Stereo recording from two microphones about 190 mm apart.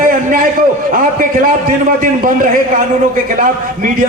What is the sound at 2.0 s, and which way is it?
Speech, 45° right (ahead or behind).